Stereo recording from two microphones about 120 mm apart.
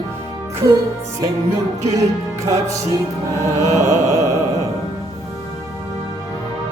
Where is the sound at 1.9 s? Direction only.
25° right (ahead or behind).